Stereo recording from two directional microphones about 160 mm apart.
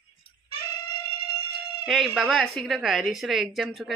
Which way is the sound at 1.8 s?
Centre (ahead or behind).